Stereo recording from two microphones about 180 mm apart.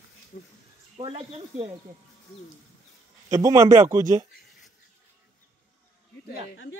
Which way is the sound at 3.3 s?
20° right (ahead or behind).